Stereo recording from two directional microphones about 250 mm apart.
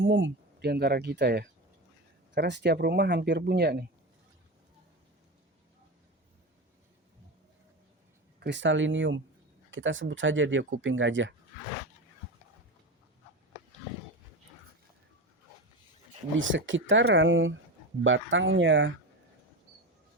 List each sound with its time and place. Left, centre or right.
0.0 s speech: right
8.4 s speech: right
16.4 s speech: right